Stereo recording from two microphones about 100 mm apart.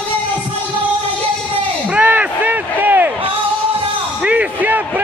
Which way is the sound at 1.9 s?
15° right (ahead or behind).